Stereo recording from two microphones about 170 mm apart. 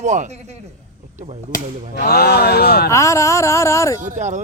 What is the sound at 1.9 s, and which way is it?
Speech, 70° left (ahead or behind).